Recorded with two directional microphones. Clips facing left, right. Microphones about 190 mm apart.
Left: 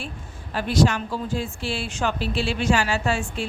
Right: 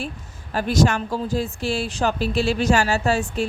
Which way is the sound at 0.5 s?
45° right (ahead or behind).